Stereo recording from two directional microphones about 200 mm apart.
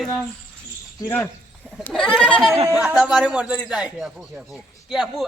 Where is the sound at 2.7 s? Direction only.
5° right (ahead or behind).